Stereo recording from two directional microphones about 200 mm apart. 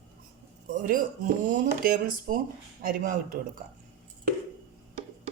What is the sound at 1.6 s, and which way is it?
A woman's voice, 45° right (ahead or behind).